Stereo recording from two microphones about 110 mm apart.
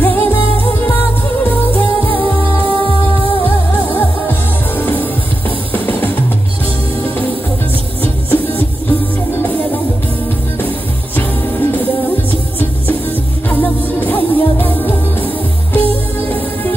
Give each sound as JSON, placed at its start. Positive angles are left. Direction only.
{"t": 0.0, "sound": "music", "side_deg": 20}
{"t": 1.7, "sound": "music", "side_deg": 15}
{"t": 3.9, "sound": "music", "side_deg": 20}
{"t": 8.0, "sound": "music", "side_deg": 20}
{"t": 11.1, "sound": "music", "side_deg": 20}